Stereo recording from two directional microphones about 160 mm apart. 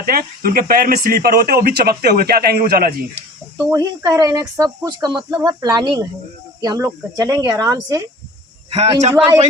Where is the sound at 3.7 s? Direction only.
20° right (ahead or behind).